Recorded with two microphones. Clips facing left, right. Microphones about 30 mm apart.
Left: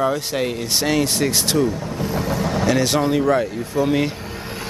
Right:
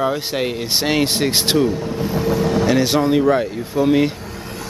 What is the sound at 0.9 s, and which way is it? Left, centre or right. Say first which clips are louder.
Speech: right 2 dB; right.